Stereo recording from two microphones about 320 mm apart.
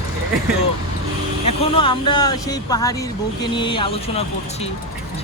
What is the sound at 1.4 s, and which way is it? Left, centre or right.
Speech, centre.